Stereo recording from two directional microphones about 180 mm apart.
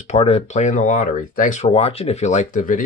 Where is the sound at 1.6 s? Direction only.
35° left (ahead or behind).